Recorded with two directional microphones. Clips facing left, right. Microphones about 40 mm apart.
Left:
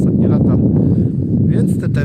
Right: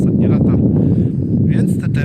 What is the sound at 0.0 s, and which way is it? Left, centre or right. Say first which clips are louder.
Speech: even; right.